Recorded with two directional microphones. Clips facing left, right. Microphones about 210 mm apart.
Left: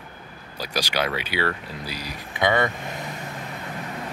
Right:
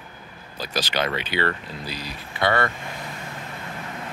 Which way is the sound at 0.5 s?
10° left (ahead or behind).